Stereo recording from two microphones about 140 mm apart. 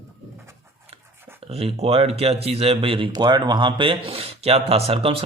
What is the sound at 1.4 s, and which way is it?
Speech, 45° right (ahead or behind).